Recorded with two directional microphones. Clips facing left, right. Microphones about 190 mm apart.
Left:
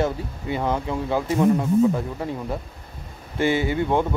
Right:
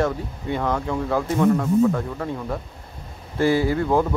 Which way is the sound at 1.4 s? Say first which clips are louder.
Even; 20° left (ahead or behind).